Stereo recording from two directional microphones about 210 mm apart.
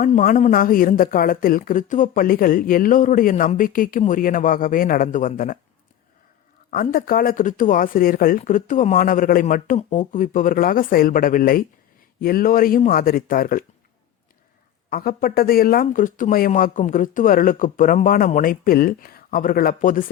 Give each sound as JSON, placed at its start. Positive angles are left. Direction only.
{"t": 0.0, "sound": "a woman's voice", "side_deg": 40}
{"t": 6.7, "sound": "a woman's voice", "side_deg": 40}
{"t": 14.8, "sound": "a woman's voice", "side_deg": 45}